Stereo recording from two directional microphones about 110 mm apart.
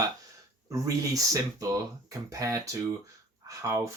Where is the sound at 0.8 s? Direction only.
30° right (ahead or behind).